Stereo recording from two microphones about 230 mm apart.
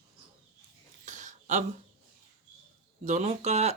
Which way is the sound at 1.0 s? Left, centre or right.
Right.